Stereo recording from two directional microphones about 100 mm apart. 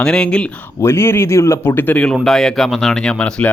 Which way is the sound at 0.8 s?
25° left (ahead or behind).